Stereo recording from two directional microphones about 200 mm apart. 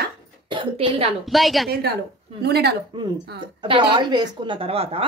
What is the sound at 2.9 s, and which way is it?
A woman's voice, 20° right (ahead or behind).